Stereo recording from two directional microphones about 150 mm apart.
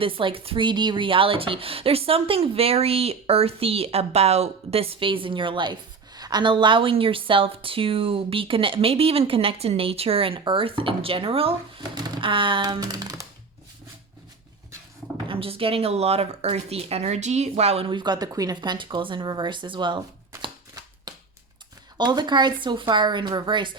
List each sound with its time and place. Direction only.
0.0 s speech: 35° right (ahead or behind)
11.9 s computer keyboard: 30° right (ahead or behind)
15.3 s speech: 40° right (ahead or behind)
21.1 s a sound: 30° right (ahead or behind)
21.9 s speech: 30° right (ahead or behind)